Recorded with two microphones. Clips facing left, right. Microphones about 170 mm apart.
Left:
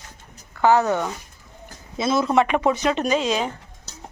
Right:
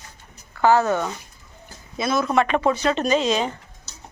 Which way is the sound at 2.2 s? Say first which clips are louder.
Even; 15° left (ahead or behind).